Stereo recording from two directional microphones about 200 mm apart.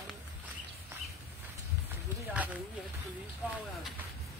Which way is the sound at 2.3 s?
5° right (ahead or behind).